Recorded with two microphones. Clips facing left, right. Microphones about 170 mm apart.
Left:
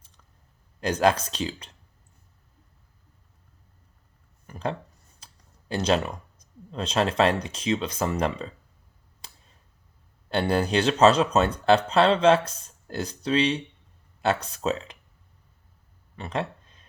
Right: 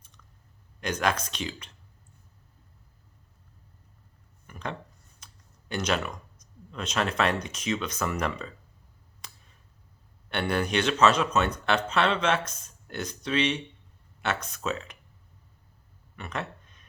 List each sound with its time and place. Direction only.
0.8 s speech: 30° left (ahead or behind)
4.4 s a sound: 30° left (ahead or behind)
5.2 s clicking: 30° left (ahead or behind)
6.7 s speech: 30° left (ahead or behind)
10.2 s speech: 30° left (ahead or behind)
16.1 s a sound: 30° left (ahead or behind)